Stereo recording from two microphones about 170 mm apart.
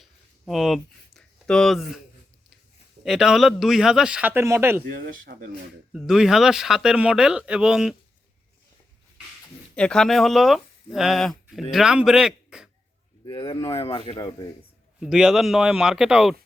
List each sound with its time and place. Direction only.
0.0 s a sound: centre (ahead or behind)
3.0 s speech: centre (ahead or behind)
4.9 s speech: 60° right (ahead or behind)
5.9 s speech: centre (ahead or behind)
9.7 s a man's voice: 5° left (ahead or behind)
13.2 s speech: 25° left (ahead or behind)
15.0 s speech: 5° right (ahead or behind)